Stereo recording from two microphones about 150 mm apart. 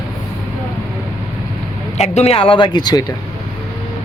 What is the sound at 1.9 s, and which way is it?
Speech, 45° left (ahead or behind).